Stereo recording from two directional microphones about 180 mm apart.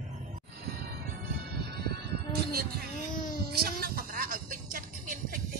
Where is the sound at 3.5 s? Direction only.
55° right (ahead or behind).